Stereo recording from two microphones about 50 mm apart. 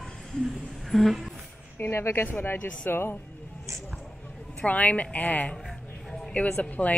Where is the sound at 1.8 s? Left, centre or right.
Left.